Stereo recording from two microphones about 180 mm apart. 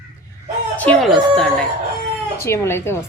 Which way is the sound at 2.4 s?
15° left (ahead or behind).